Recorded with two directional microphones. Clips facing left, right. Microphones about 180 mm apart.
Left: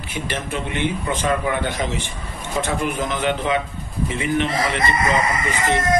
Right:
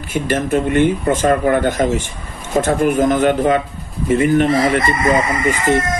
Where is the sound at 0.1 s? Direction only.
45° right (ahead or behind).